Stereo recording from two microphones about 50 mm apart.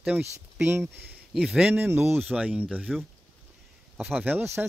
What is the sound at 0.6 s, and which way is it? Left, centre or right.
Speech, right.